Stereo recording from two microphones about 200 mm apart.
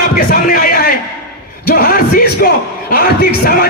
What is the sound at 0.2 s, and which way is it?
Speech, 45° left (ahead or behind).